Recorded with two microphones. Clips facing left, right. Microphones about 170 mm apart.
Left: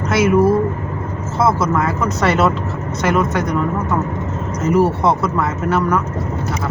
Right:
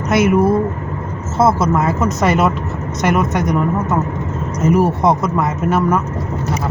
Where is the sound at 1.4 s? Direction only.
25° right (ahead or behind).